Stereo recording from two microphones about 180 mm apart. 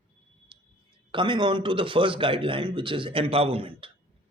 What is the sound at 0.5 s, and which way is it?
Clicking, 30° right (ahead or behind).